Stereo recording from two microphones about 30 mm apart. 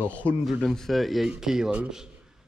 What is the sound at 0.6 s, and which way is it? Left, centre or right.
Speech, centre.